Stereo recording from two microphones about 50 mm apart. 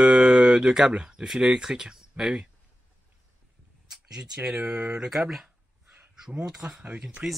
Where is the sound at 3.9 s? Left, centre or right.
Centre.